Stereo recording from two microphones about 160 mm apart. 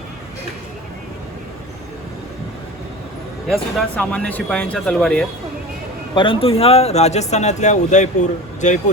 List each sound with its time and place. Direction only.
3.5 s speech: 5° left (ahead or behind)
6.1 s speech: 35° left (ahead or behind); by 8.8 s 50° left (ahead or behind)